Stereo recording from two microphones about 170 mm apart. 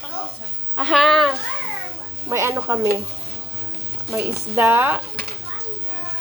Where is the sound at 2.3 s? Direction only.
15° right (ahead or behind).